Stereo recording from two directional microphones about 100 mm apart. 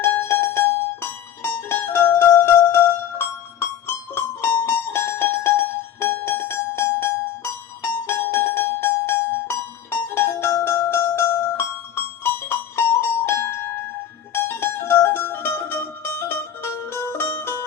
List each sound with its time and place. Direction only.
0.0 s music: 25° left (ahead or behind)